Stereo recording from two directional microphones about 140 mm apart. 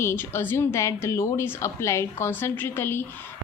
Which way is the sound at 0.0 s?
20° left (ahead or behind).